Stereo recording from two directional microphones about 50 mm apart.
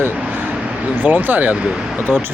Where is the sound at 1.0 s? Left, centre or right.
Right.